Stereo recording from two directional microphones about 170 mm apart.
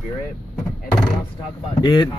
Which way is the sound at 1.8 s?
25° left (ahead or behind).